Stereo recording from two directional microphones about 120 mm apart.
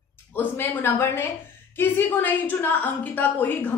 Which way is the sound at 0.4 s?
20° left (ahead or behind).